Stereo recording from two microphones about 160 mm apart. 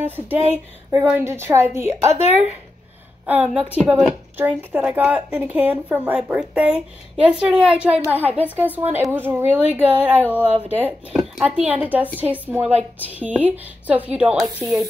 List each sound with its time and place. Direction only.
0.0 s a woman's voice: 10° right (ahead or behind)
3.3 s a woman's voice: 10° right (ahead or behind)